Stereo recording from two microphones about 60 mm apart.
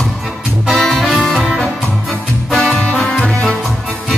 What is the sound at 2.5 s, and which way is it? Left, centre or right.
Music, centre.